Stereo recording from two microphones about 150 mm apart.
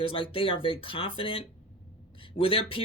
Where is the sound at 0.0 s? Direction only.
35° left (ahead or behind).